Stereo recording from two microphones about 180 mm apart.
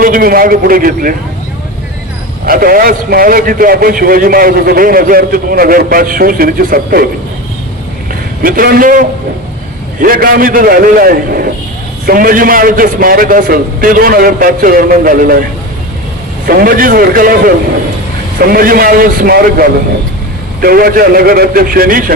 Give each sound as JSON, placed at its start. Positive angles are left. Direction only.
{"t": 0.0, "sound": "a man's voice", "side_deg": -50}
{"t": 2.5, "sound": "a man's voice", "side_deg": -50}
{"t": 8.4, "sound": "a man's voice", "side_deg": -55}
{"t": 16.5, "sound": "a man's voice", "side_deg": -55}